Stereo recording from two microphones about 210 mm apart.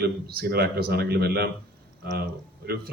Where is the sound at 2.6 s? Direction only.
45° right (ahead or behind).